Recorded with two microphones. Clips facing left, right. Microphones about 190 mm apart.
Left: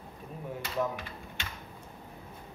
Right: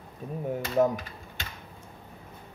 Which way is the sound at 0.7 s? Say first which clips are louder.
Right 8 dB; 40° right (ahead or behind).